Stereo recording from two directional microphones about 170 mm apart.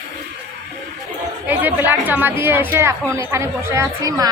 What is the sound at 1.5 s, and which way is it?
A woman's voice, 10° right (ahead or behind).